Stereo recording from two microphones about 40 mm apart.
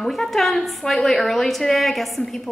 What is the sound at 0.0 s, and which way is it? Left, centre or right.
A woman's voice, centre.